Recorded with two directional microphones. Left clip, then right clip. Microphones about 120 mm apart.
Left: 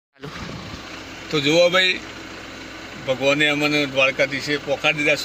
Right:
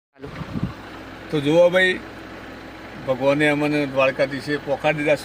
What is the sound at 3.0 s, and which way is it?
Speech, 20° right (ahead or behind).